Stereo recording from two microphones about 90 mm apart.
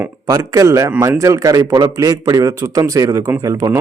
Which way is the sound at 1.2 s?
40° right (ahead or behind).